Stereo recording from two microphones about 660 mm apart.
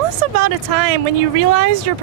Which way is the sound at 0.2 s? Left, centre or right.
Right.